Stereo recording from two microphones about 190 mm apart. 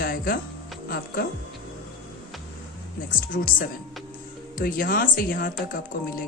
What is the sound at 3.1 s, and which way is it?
Speech, 45° left (ahead or behind).